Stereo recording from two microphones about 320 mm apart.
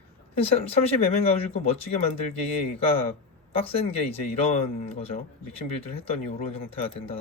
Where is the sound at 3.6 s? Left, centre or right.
Centre.